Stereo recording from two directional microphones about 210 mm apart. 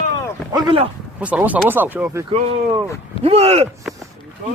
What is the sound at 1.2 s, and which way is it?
Speech, 5° right (ahead or behind).